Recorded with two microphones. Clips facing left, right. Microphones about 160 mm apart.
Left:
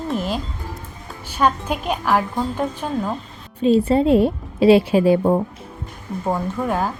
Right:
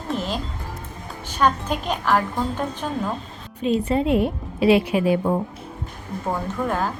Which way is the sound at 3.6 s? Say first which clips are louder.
Left 5 dB; 30° left (ahead or behind).